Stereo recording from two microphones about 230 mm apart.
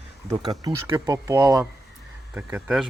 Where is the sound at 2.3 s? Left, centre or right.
Centre.